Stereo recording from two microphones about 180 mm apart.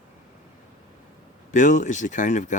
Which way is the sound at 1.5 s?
45° left (ahead or behind).